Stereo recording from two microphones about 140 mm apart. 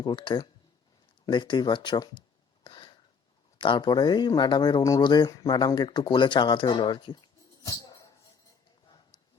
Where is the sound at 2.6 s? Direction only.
35° left (ahead or behind).